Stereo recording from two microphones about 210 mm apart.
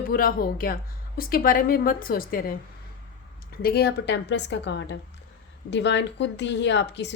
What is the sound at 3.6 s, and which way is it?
Speech, 50° left (ahead or behind).